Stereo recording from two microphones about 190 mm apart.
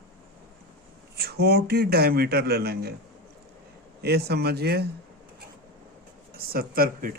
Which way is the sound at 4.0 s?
55° right (ahead or behind).